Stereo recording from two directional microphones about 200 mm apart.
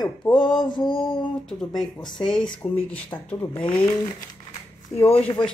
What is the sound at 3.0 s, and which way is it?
Speech, 25° left (ahead or behind).